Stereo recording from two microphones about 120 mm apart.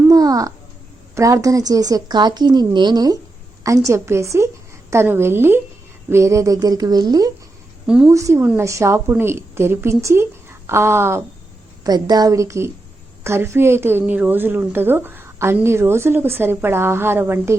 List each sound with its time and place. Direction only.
0.1 s a sound: 30° right (ahead or behind)
1.1 s a woman's voice: 25° right (ahead or behind)
7.9 s a woman's voice: 10° right (ahead or behind)
8.1 s a woman's voice: 25° right (ahead or behind)
11.8 s a woman's voice: 35° right (ahead or behind)